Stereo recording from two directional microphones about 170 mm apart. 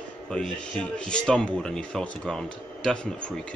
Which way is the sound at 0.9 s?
5° left (ahead or behind).